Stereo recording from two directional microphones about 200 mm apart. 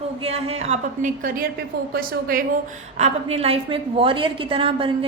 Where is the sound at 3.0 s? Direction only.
30° right (ahead or behind).